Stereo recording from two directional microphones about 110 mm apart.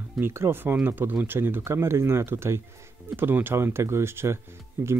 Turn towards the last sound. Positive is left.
turn(degrees=-25)  # may be behind; listen again after turning